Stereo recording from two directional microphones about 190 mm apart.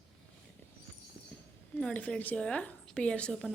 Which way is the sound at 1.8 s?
5° left (ahead or behind).